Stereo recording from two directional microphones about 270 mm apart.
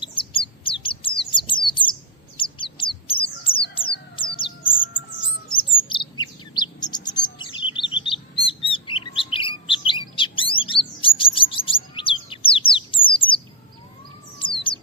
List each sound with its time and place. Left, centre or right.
0.0 s bird: centre
5.5 s chirp: centre
14.3 s bird: centre